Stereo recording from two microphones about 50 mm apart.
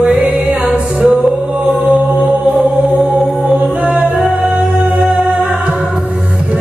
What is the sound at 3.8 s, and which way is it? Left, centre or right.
A capella, right.